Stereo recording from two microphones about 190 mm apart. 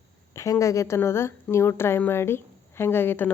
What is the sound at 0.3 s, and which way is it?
A woman's voice, 15° left (ahead or behind).